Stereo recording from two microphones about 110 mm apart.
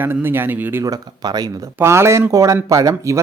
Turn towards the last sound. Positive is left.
turn(degrees=-30)  # may be behind; listen again after turning